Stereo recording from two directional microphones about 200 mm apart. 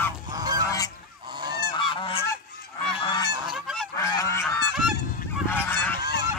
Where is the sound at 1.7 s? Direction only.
25° left (ahead or behind).